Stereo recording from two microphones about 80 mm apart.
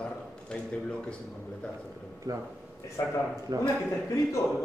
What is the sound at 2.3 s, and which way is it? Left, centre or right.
Speech, right.